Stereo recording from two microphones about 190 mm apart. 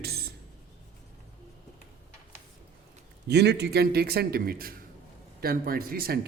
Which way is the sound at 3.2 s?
60° right (ahead or behind).